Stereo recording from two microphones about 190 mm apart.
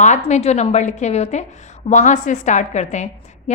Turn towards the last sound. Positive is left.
turn(degrees=40)  # may be behind; listen again after turning